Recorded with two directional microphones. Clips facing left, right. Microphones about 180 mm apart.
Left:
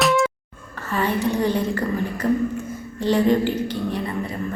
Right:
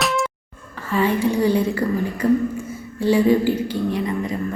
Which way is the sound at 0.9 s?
10° right (ahead or behind).